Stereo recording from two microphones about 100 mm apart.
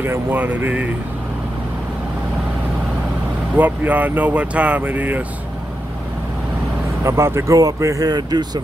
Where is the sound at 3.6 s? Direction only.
15° right (ahead or behind).